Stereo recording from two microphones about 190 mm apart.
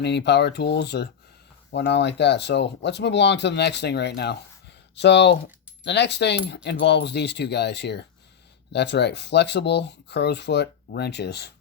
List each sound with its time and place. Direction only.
0.0 s speech: 65° left (ahead or behind)